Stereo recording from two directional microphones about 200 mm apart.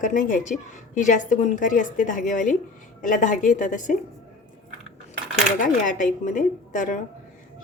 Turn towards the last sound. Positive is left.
turn(degrees=40)  # may be behind; listen again after turning